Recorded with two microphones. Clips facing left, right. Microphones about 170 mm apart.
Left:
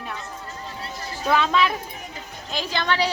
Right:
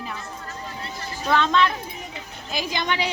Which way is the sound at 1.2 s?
5° left (ahead or behind).